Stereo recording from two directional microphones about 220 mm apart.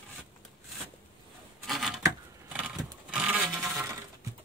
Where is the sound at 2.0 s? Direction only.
15° right (ahead or behind).